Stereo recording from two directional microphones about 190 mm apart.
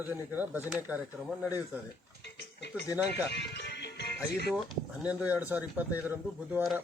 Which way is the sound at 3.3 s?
65° left (ahead or behind).